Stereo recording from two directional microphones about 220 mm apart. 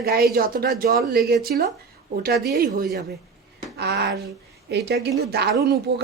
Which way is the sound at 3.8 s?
50° right (ahead or behind).